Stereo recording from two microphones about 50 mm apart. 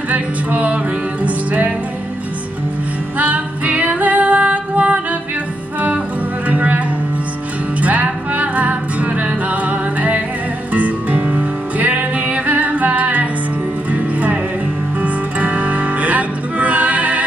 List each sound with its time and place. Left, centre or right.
0.1 s singing: right
1.2 s music: right
3.2 s music: right
6.5 s music: right
7.8 s music: right